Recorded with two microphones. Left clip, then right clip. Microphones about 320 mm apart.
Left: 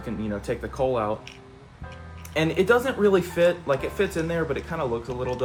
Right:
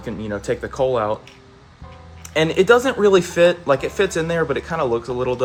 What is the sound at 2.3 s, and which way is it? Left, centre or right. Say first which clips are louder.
Speech: right 6 dB; right.